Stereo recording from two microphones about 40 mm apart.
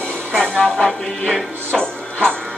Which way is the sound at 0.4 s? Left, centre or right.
Left.